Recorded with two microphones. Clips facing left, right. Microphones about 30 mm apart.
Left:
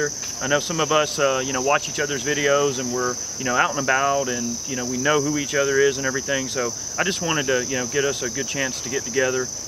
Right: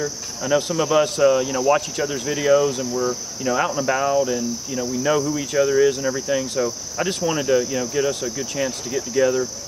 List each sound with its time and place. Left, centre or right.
0.0 s speech: centre
2.9 s speech: centre
3.3 s speech: centre